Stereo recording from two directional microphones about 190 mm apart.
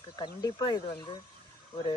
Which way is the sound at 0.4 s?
25° left (ahead or behind).